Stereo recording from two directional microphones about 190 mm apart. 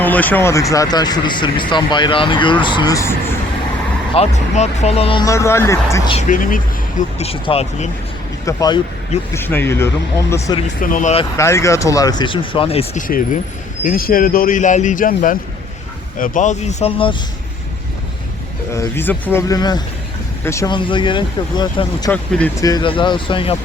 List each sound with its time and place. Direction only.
0.0 s speech: 10° left (ahead or behind)
4.1 s speech: 35° left (ahead or behind)
5.2 s speech: 15° left (ahead or behind)
6.1 s speech: 40° left (ahead or behind)
7.2 s speech: 30° left (ahead or behind)
8.4 s speech: 20° left (ahead or behind)
10.8 s speech: 45° left (ahead or behind)
11.3 s speech: 15° left (ahead or behind); by 17.2 s 30° left (ahead or behind)
18.7 s speech: 15° left (ahead or behind)
22.1 s speech: 10° left (ahead or behind); by 23.6 s 25° left (ahead or behind)